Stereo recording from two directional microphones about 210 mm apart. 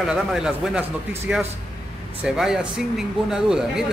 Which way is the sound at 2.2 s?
5° right (ahead or behind).